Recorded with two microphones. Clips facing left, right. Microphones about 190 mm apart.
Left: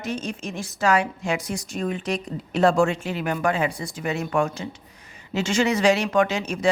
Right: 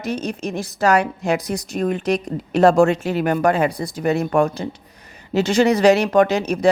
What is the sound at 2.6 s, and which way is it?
Speech, 40° right (ahead or behind).